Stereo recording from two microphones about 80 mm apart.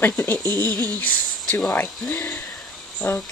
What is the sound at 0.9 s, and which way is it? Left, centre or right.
Speech, left.